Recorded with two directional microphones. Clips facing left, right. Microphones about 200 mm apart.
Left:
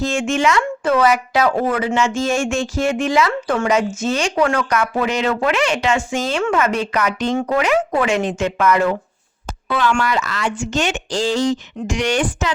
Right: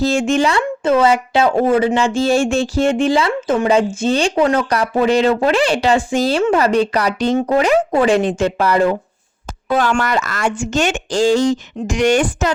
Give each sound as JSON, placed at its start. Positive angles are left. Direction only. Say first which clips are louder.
{"t": 0.0, "sound": "speech", "louder": "right 3 dB", "side_deg": -35}
{"t": 9.6, "sound": "speech", "louder": "right 2 dB", "side_deg": -45}